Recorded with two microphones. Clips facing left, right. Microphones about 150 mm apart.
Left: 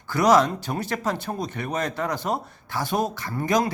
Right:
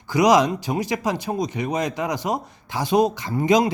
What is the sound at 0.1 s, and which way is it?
Speech, 15° right (ahead or behind).